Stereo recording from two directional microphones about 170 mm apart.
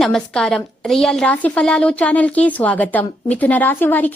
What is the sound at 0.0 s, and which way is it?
A woman's voice, 5° left (ahead or behind).